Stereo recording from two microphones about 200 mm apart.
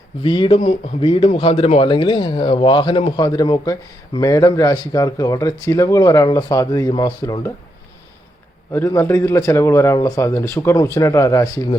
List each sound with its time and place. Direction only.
0.2 s speech: 25° left (ahead or behind)
8.7 s speech: 10° left (ahead or behind)